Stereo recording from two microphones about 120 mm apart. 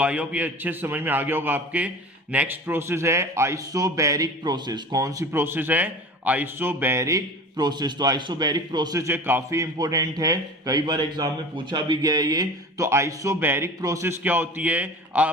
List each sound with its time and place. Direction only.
0.0 s a man's voice: 10° right (ahead or behind)
7.5 s a man's voice: 35° right (ahead or behind); by 15.3 s 15° right (ahead or behind)